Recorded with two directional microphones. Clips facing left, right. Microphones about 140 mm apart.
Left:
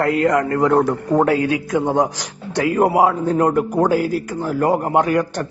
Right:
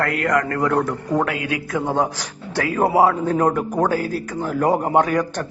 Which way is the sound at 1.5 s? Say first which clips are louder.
Left 4 dB; 20° left (ahead or behind).